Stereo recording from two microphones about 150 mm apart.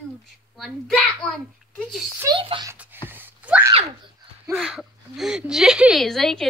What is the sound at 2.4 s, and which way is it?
Speech, 35° right (ahead or behind).